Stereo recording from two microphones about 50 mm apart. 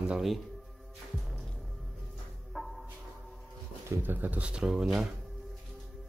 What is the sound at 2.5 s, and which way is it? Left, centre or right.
Music, centre.